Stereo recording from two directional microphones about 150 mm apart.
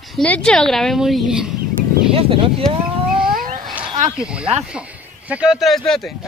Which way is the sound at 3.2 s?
65° right (ahead or behind).